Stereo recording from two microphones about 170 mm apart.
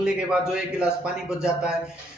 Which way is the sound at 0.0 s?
5° right (ahead or behind).